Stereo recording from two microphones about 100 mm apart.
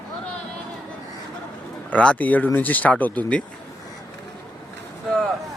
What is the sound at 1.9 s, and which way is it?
Speech, 15° left (ahead or behind).